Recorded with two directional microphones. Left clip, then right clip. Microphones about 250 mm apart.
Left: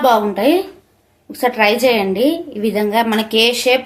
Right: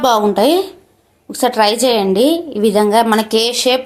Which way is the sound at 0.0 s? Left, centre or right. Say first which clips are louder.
Right 1 dB; right.